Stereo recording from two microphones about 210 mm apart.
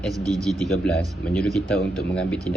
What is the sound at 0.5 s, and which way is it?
Speech, 5° left (ahead or behind).